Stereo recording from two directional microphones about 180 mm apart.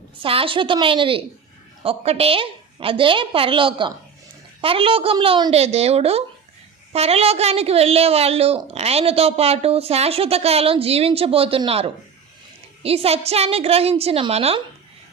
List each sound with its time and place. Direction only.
0.2 s a woman's voice: 30° right (ahead or behind)